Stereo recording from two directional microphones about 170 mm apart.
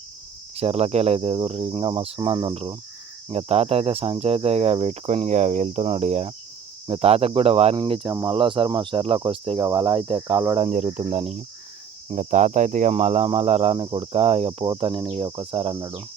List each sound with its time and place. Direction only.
0.5 s cricket: 35° right (ahead or behind)
10.6 s cricket: 40° right (ahead or behind)
15.8 s speech: 20° right (ahead or behind)